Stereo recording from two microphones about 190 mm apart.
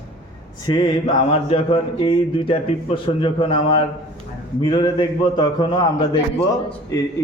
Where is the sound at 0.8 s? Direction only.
30° left (ahead or behind).